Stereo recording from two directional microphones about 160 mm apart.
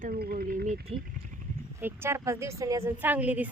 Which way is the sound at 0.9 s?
35° right (ahead or behind).